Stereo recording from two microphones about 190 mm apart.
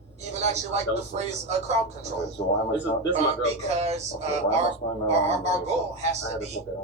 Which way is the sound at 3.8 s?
35° right (ahead or behind).